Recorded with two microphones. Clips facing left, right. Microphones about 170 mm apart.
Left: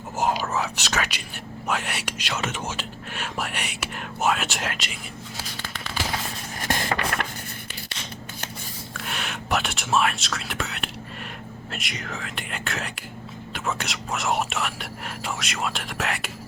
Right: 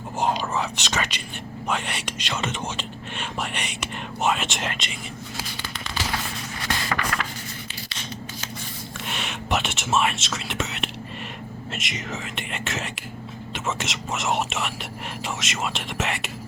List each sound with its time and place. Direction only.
0.2 s speech: 5° left (ahead or behind)
5.8 s fireworks: 10° left (ahead or behind)
6.6 s a sound: 45° left (ahead or behind)
9.0 s speech: centre (ahead or behind)